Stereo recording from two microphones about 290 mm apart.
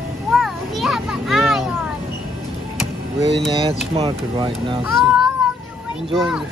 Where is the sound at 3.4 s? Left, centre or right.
Centre.